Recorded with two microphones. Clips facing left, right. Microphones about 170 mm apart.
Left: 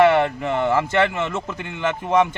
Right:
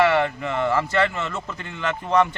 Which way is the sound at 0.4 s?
20° left (ahead or behind).